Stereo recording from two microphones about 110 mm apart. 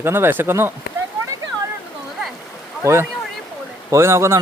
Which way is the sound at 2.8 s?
25° right (ahead or behind).